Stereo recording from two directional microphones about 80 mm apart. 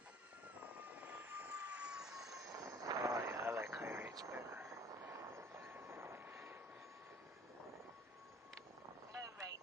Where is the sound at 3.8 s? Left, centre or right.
Right.